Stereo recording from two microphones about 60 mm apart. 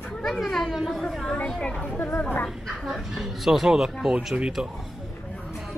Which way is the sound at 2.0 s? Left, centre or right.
Left.